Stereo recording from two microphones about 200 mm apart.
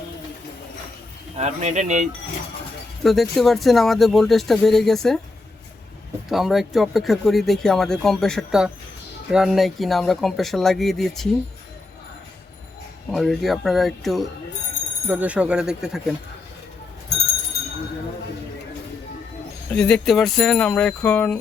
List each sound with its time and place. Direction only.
1.4 s speech: 35° right (ahead or behind)
3.0 s speech: centre (ahead or behind)
6.2 s speech: centre (ahead or behind)
13.1 s speech: centre (ahead or behind)
19.7 s speech: 5° left (ahead or behind)